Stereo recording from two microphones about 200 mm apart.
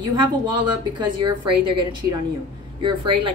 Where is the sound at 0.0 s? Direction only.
20° right (ahead or behind).